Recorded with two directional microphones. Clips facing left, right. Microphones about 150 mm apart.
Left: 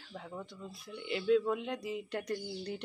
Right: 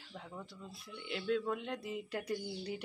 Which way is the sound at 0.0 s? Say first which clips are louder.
Left 3 dB; centre (ahead or behind).